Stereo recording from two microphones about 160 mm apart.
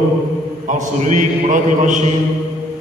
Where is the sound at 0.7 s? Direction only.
50° right (ahead or behind).